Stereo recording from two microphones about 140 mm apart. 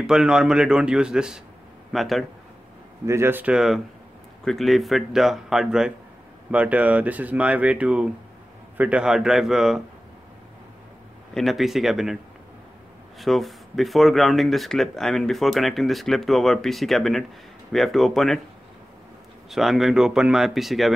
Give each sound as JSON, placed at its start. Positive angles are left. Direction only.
{"t": 0.0, "sound": "speech", "side_deg": -5}
{"t": 3.1, "sound": "speech", "side_deg": -15}
{"t": 3.5, "sound": "speech", "side_deg": 0}
{"t": 11.3, "sound": "speech", "side_deg": 0}
{"t": 13.2, "sound": "speech", "side_deg": 0}
{"t": 19.5, "sound": "speech", "side_deg": 0}